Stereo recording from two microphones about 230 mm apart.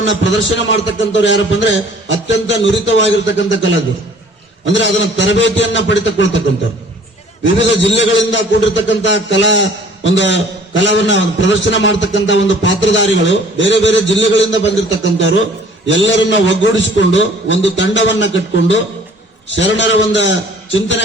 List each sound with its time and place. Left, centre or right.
0.1 s a man's voice: left
7.9 s a man's voice: left
20.7 s a sound: left